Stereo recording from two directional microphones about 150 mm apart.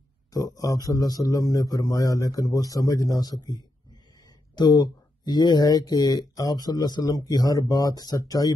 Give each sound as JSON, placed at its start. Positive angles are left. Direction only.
{"t": 0.3, "sound": "speech", "side_deg": 25}